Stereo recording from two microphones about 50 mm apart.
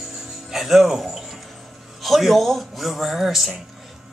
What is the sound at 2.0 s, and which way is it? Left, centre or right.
A man's voice, centre.